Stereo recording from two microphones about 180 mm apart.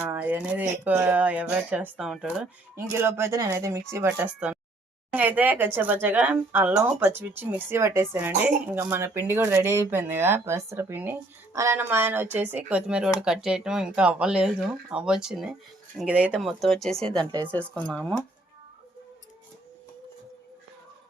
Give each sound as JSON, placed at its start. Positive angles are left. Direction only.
{"t": 0.1, "sound": "speech", "side_deg": -10}
{"t": 17.2, "sound": "speech", "side_deg": -25}
{"t": 17.5, "sound": "speech", "side_deg": 5}